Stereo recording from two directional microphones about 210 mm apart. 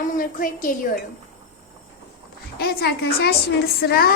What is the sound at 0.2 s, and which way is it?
Speech, 40° left (ahead or behind).